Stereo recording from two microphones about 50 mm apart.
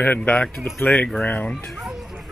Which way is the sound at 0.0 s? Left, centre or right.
Left.